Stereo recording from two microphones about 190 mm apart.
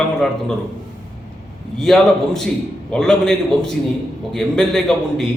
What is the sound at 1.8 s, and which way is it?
A man's voice, centre (ahead or behind).